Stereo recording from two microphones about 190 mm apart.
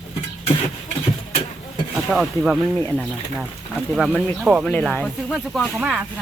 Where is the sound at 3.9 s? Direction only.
5° right (ahead or behind).